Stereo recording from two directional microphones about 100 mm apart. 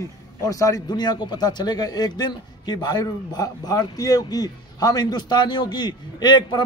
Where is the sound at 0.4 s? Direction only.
35° left (ahead or behind).